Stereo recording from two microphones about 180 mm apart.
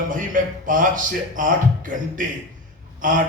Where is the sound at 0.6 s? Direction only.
45° right (ahead or behind).